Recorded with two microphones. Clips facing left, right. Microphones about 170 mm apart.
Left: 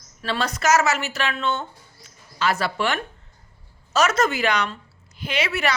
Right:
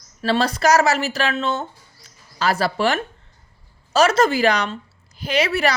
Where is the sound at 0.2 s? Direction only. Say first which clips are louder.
Right 6 dB; 30° right (ahead or behind).